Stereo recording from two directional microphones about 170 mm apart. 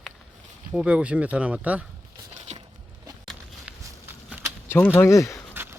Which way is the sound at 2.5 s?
40° right (ahead or behind).